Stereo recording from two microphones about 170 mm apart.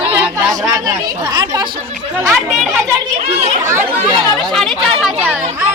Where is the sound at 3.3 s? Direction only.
45° right (ahead or behind).